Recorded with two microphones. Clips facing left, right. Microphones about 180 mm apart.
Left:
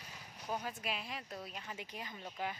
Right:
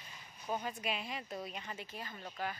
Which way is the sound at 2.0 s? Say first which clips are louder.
Even; 15° left (ahead or behind).